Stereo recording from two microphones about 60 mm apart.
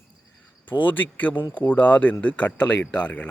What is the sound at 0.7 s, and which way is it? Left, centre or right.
Speech, left.